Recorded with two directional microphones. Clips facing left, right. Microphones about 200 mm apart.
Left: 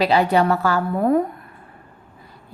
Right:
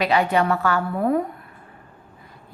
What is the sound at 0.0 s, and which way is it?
A woman's voice, 35° left (ahead or behind).